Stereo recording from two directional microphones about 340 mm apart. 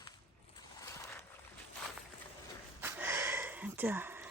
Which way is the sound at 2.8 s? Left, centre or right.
Centre.